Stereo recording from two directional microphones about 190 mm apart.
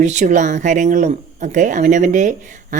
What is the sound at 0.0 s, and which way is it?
Speech, 40° right (ahead or behind).